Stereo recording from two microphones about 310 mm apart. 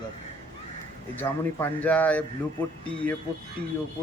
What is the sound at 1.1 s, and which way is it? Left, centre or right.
Speech, centre.